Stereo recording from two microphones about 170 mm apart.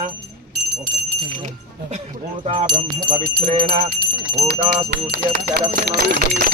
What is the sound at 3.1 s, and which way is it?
Speech, 55° right (ahead or behind).